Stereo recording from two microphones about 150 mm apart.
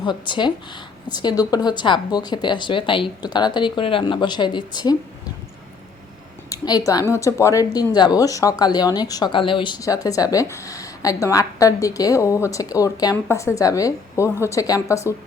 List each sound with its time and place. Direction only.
0.0 s speech: 30° left (ahead or behind)
6.5 s speech: 25° left (ahead or behind)